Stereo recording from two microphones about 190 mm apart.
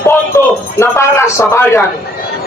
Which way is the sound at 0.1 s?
15° left (ahead or behind).